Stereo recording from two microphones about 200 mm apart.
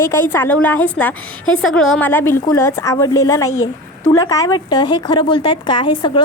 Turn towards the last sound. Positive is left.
turn(degrees=25)  # may be behind; listen again after turning